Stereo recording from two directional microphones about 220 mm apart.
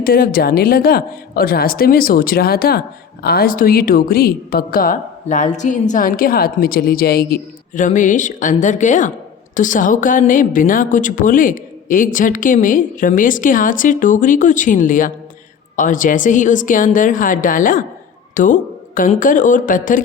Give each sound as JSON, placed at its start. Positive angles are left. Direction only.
{"t": 0.0, "sound": "a woman's voice", "side_deg": 45}